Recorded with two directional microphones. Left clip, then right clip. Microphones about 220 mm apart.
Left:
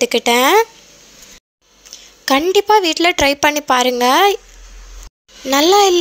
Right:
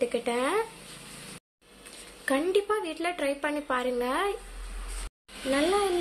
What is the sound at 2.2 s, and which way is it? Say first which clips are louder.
A woman's voice: left 13 dB; 45° left (ahead or behind).